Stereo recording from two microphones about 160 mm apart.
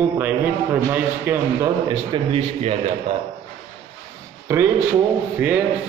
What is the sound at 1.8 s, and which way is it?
Speech, 35° right (ahead or behind).